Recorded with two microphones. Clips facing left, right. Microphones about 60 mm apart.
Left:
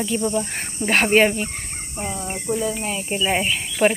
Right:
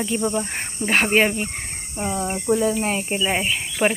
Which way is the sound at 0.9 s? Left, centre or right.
Centre.